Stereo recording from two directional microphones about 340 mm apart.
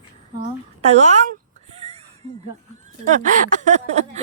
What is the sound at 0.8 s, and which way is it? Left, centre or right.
Speech, centre.